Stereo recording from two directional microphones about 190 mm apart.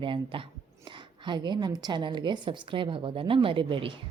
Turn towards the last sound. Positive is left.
turn(degrees=-25)  # may be behind; listen again after turning